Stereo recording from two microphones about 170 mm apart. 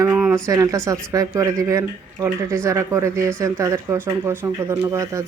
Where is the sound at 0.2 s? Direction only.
5° right (ahead or behind).